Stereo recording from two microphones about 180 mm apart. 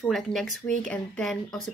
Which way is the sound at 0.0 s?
Centre (ahead or behind).